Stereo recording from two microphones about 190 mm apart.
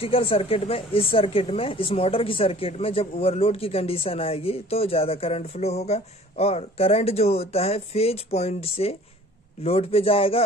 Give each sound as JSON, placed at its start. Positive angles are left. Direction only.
{"t": 0.0, "sound": "speech", "side_deg": 30}